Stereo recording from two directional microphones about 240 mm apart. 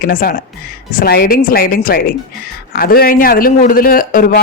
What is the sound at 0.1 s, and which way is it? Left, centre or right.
A man's voice, left.